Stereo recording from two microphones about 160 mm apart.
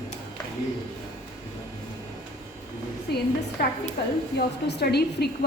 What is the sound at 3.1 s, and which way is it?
Speech, 90° left.